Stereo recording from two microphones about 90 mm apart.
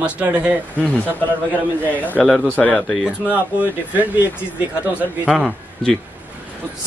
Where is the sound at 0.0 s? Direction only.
15° right (ahead or behind).